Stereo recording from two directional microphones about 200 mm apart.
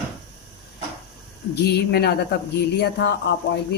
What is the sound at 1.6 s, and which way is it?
Speech, 55° left (ahead or behind).